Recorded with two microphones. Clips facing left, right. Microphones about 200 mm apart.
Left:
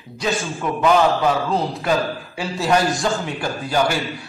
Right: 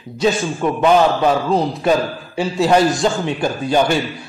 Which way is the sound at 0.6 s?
20° right (ahead or behind).